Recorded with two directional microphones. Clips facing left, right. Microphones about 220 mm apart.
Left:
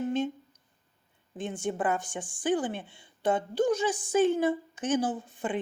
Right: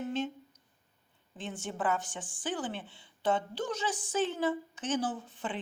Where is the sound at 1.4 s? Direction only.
15° left (ahead or behind).